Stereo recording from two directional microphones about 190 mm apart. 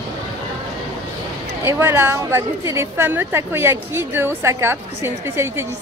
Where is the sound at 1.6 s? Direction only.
10° right (ahead or behind).